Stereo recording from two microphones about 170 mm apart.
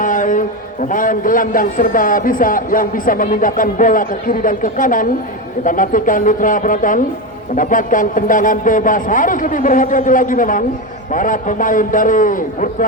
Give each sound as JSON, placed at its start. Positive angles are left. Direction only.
{"t": 0.0, "sound": "a man's voice", "side_deg": 50}